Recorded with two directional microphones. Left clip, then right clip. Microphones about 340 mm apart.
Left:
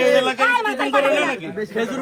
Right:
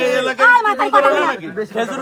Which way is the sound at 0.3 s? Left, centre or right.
Centre.